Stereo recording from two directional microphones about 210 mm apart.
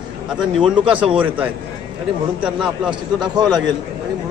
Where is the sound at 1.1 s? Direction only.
5° right (ahead or behind).